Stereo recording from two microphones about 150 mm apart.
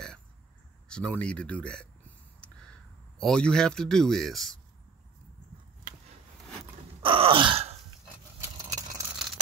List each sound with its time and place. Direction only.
0.8 s speech: 5° left (ahead or behind)
3.2 s speech: 5° left (ahead or behind)
7.0 s groan: 35° right (ahead or behind)
8.4 s a sound: 20° right (ahead or behind)